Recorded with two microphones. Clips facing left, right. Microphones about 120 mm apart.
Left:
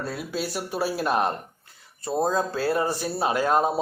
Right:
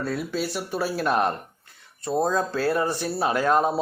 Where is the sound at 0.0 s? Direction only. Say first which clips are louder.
Right 3 dB; 5° left (ahead or behind).